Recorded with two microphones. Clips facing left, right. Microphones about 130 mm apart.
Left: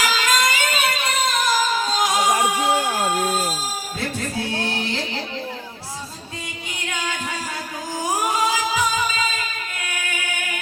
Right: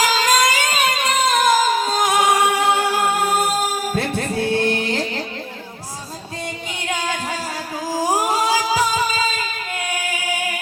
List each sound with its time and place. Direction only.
0.1 s music: 40° right (ahead or behind)
6.9 s music: 35° right (ahead or behind)
9.8 s singing: 35° right (ahead or behind)